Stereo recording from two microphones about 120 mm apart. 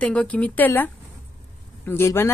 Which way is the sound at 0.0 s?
10° left (ahead or behind).